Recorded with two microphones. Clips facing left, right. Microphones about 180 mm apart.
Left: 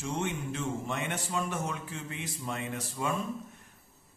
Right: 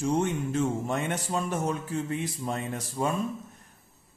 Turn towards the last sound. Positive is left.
turn(degrees=-40)  # may be behind; listen again after turning